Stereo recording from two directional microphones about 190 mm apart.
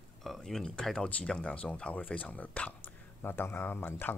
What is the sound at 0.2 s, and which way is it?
Speech, centre (ahead or behind).